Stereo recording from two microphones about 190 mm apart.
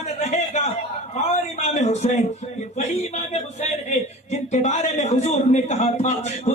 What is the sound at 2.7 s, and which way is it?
Chuckle, 35° left (ahead or behind).